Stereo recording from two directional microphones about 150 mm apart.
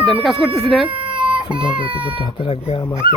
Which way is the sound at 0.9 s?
35° right (ahead or behind).